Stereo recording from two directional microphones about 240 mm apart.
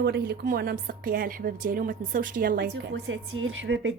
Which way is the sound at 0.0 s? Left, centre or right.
Right.